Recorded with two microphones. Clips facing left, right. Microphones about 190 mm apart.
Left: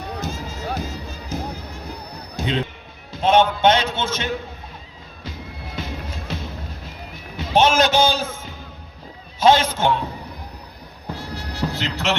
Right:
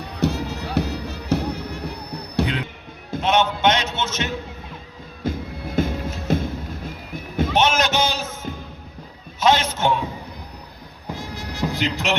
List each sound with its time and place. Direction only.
0.2 s music: 65° right (ahead or behind)
3.2 s a sound: 30° left (ahead or behind)
3.6 s a man's voice: 30° left (ahead or behind)
5.2 s music: 50° right (ahead or behind)
7.5 s a sound: 30° left (ahead or behind)
9.4 s a man's voice: 30° left (ahead or behind)
11.1 s music: 10° right (ahead or behind)